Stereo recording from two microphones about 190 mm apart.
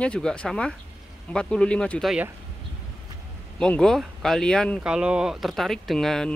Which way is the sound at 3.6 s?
5° left (ahead or behind).